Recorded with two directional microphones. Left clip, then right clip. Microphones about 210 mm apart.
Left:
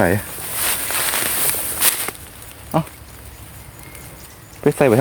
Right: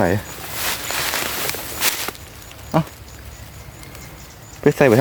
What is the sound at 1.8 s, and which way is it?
Walk, 10° left (ahead or behind).